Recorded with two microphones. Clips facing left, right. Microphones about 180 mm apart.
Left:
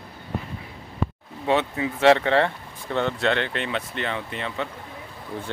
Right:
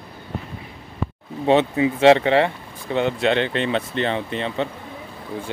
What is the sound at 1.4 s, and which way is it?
Speech, 20° right (ahead or behind).